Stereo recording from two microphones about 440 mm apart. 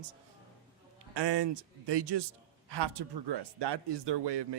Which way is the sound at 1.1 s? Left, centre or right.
Right.